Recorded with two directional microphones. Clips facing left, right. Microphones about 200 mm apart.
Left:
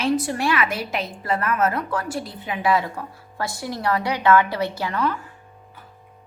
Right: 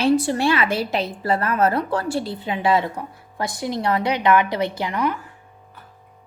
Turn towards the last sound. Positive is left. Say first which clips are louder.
# right 1 dB
turn(degrees=-15)  # may be behind; listen again after turning